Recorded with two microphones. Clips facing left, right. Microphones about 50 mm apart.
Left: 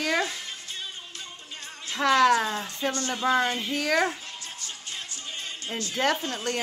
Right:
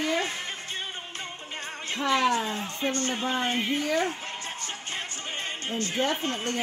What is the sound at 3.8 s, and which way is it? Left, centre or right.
Speech, left.